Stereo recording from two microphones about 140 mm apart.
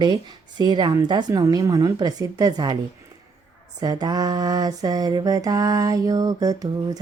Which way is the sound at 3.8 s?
30° right (ahead or behind).